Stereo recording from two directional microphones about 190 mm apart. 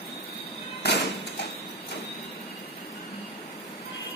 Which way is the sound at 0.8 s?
60° left (ahead or behind).